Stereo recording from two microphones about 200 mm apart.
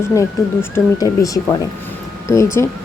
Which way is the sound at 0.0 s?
15° left (ahead or behind).